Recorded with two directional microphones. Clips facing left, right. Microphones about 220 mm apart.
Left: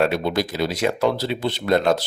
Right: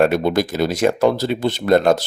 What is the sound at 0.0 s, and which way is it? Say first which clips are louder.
Speech: right 5 dB; 50° right (ahead or behind).